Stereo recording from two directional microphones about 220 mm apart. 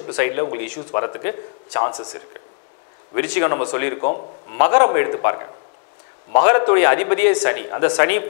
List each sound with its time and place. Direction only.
0.0 s speech: 20° left (ahead or behind)
3.2 s speech: 15° left (ahead or behind)
4.0 s a man's voice: 35° left (ahead or behind)
4.6 s speech: 20° left (ahead or behind)
6.7 s speech: 15° left (ahead or behind)